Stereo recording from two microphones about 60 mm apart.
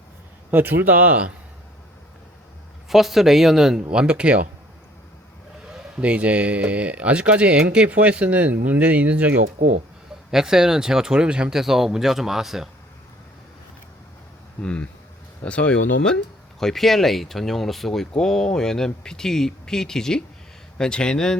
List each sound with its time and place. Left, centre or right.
0.5 s speech: right
2.9 s speech: centre
6.0 s speech: right
10.3 s speech: centre
14.6 s speech: centre
16.6 s speech: centre